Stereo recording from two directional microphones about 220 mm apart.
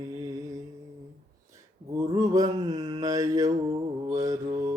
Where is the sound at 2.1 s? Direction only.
15° right (ahead or behind).